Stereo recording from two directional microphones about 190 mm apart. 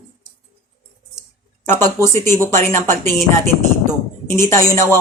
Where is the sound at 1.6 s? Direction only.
10° left (ahead or behind).